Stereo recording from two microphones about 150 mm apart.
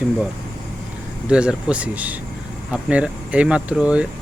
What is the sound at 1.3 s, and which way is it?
Speech, 5° right (ahead or behind).